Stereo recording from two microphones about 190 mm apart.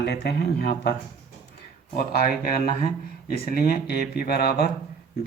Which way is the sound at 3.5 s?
50° left (ahead or behind).